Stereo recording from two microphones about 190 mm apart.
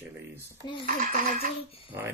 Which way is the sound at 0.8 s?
45° right (ahead or behind).